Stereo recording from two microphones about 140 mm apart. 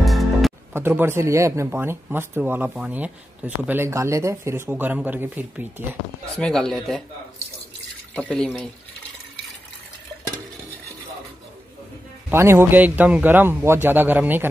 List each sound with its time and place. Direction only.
0.0 s music: centre (ahead or behind)
0.7 s speech: 15° right (ahead or behind)
6.3 s speech: 5° left (ahead or behind)
8.1 s speech: 10° left (ahead or behind)
12.3 s speech: 15° right (ahead or behind)